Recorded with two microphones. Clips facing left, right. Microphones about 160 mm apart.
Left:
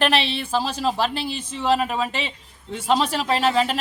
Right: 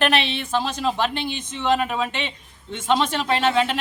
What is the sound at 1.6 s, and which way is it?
A woman's voice, 5° left (ahead or behind).